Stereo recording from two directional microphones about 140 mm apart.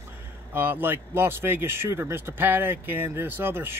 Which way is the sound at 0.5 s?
15° right (ahead or behind).